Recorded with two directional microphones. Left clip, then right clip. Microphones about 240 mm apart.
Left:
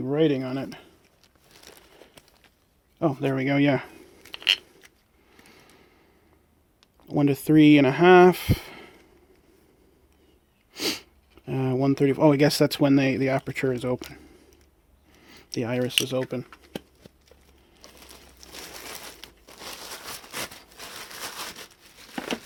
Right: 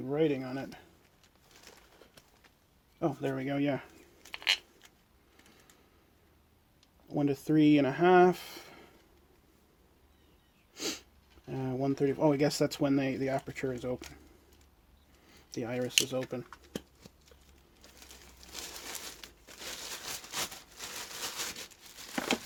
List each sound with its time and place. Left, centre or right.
0.0 s speech: left
3.0 s speech: left
4.2 s a sound: centre
7.1 s speech: left
10.8 s sneeze: left
11.4 s speech: left
15.3 s a sound: left
16.0 s speech: left